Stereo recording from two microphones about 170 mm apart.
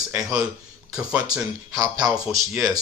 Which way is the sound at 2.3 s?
Centre (ahead or behind).